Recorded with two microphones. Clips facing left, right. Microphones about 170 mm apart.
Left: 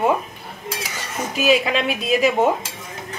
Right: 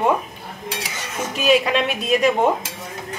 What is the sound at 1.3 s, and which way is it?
Speech, centre (ahead or behind).